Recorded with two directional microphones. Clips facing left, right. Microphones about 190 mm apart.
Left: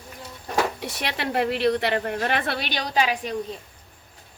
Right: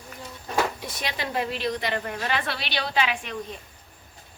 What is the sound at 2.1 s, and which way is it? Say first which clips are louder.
A woman's voice: left 3 dB; 55° left (ahead or behind).